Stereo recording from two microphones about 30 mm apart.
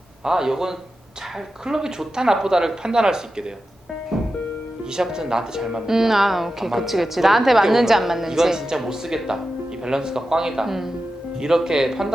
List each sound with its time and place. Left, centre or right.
0.3 s a woman's voice: centre
4.1 s music: centre
5.1 s a woman's voice: centre